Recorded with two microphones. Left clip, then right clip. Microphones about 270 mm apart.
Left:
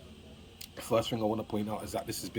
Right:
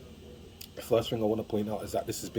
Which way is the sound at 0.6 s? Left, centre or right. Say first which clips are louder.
Right 2 dB; centre.